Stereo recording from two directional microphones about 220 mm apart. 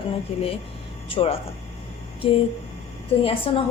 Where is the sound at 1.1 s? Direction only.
25° left (ahead or behind).